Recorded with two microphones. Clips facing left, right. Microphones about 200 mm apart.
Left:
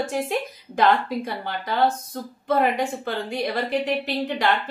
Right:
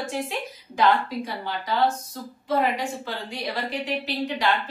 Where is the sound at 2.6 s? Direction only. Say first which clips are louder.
Left 2 dB; 55° left (ahead or behind).